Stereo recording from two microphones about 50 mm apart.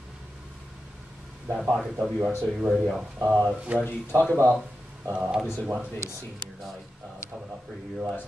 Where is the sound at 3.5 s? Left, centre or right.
Right.